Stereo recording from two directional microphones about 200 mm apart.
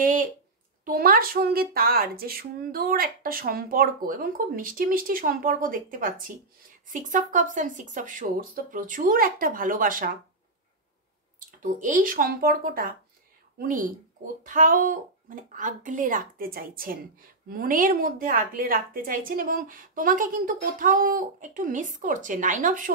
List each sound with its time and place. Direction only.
0.0 s a sound: 45° right (ahead or behind)
0.8 s a woman's voice: 45° right (ahead or behind)
11.6 s a woman's voice: 40° right (ahead or behind)